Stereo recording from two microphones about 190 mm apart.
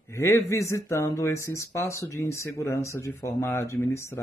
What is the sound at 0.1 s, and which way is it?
Speech, 15° left (ahead or behind).